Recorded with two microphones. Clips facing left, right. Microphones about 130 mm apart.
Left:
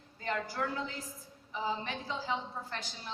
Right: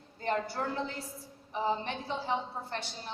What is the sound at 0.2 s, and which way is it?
A woman's voice, 30° right (ahead or behind).